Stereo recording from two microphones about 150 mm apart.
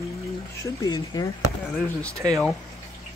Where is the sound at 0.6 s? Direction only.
20° left (ahead or behind).